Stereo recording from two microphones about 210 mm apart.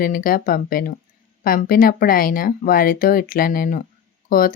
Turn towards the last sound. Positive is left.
turn(degrees=45)  # may be behind; listen again after turning